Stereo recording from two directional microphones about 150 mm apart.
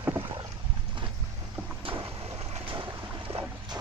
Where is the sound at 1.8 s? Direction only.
35° right (ahead or behind).